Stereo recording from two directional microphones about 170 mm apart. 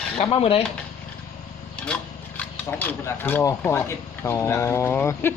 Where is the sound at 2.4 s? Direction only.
10° left (ahead or behind).